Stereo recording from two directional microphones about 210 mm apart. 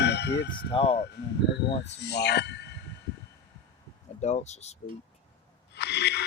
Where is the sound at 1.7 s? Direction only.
30° left (ahead or behind).